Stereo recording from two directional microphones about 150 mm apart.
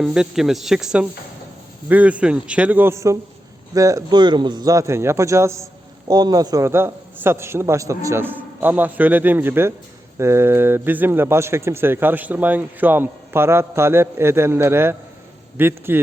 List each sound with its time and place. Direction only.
0.0 s a man's voice: 5° right (ahead or behind)